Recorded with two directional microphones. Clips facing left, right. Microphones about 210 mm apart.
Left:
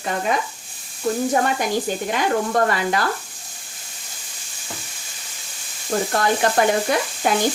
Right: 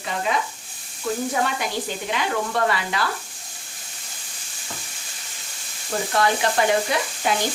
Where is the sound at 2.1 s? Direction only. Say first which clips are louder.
Left 4 dB; 45° left (ahead or behind).